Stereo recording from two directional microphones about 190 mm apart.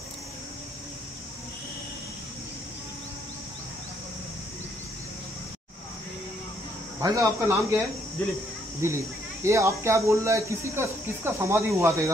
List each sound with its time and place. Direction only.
7.0 s speech: 15° right (ahead or behind)
8.8 s speech: 15° right (ahead or behind)